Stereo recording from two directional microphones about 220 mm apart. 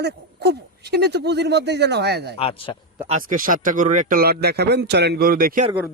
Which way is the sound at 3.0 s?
35° right (ahead or behind).